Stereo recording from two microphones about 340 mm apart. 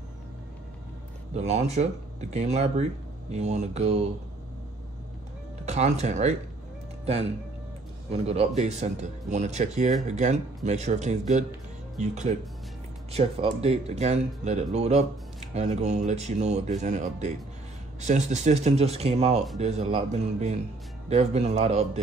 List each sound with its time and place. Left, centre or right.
1.3 s speech: centre
5.7 s speech: centre
8.1 s speech: centre